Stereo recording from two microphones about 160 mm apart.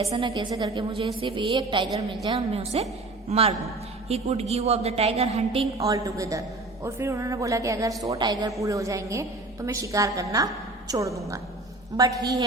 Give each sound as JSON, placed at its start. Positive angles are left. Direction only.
{"t": 0.0, "sound": "a woman's voice", "side_deg": -40}
{"t": 0.3, "sound": "a woman's voice", "side_deg": -25}
{"t": 5.7, "sound": "a woman's voice", "side_deg": -20}